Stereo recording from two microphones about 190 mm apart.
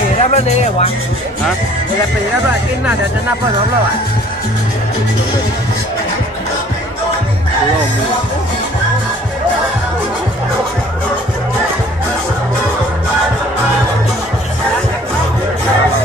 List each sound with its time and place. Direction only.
0.2 s speech: 35° left (ahead or behind)